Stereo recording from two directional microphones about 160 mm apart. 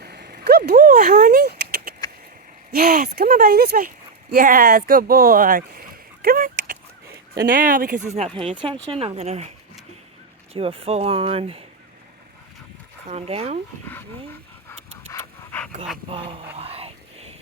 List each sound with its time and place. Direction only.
0.0 s a sound: 80° right
2.7 s speech: 65° right (ahead or behind); by 9.5 s 45° right (ahead or behind)
10.5 s speech: 35° right (ahead or behind)
13.1 s speech: 40° right (ahead or behind)
14.7 s pant: 15° left (ahead or behind)
16.0 s speech: 35° right (ahead or behind)
16.6 s a sound: 40° right (ahead or behind)